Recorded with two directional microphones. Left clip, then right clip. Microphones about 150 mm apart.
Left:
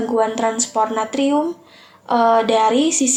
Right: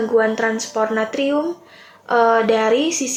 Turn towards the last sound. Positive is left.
turn(degrees=40)  # may be behind; listen again after turning